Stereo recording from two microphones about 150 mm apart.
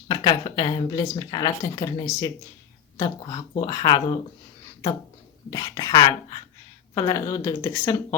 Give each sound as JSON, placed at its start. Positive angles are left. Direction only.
{"t": 0.1, "sound": "speech", "side_deg": 30}
{"t": 5.5, "sound": "speech", "side_deg": 25}